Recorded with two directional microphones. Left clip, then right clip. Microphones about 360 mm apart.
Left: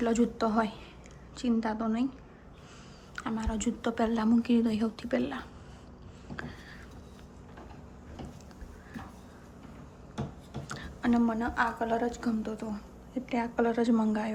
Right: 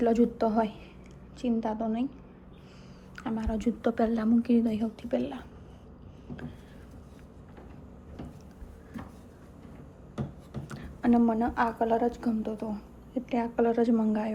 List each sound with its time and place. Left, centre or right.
0.0 s a woman's voice: centre
3.2 s a woman's voice: centre
10.7 s a woman's voice: centre